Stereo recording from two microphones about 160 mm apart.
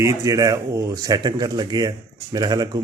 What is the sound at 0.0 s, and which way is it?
Speech, 20° right (ahead or behind).